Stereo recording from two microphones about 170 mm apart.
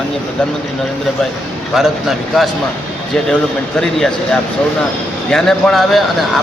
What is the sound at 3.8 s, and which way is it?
A man's voice, 5° left (ahead or behind).